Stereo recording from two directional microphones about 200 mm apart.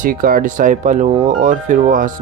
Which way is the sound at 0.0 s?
45° right (ahead or behind).